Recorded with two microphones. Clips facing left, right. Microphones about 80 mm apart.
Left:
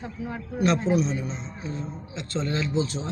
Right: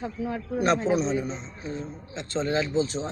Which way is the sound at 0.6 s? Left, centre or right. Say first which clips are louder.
Left 1 dB; right.